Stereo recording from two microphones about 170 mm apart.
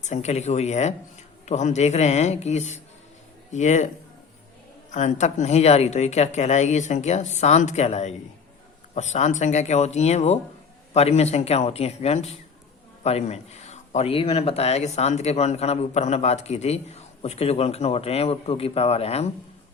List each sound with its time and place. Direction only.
0.0 s a man's voice: 40° left (ahead or behind)
4.9 s a man's voice: 45° left (ahead or behind)